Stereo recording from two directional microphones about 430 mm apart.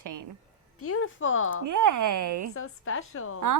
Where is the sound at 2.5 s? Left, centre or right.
Left.